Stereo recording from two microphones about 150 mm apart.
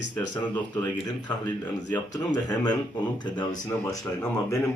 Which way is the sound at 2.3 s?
25° left (ahead or behind).